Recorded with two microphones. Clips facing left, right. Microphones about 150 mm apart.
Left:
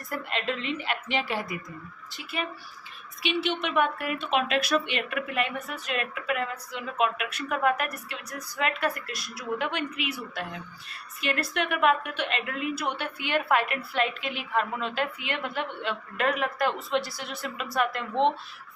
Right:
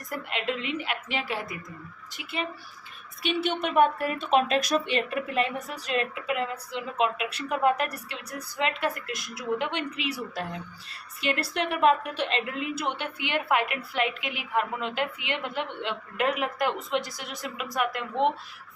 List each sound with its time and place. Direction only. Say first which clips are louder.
0.1 s a woman's voice: even; 15° right (ahead or behind)
2.1 s speech: even; 25° right (ahead or behind)
3.2 s speech: right 1 dB; 45° right (ahead or behind); by 10.1 s 25° right (ahead or behind)
11.2 s a woman's voice: right 1 dB; 30° right (ahead or behind); by 18.3 s 10° right (ahead or behind)